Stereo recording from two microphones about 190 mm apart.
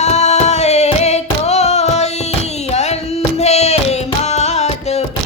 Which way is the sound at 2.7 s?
35° left (ahead or behind).